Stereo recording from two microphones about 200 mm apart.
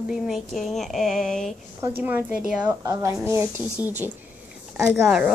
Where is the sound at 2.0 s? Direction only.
10° right (ahead or behind).